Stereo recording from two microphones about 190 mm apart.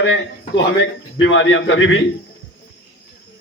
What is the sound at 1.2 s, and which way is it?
Speech, 80° left.